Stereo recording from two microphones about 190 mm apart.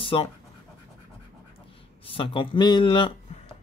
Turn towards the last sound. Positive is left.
turn(degrees=25)  # may be behind; listen again after turning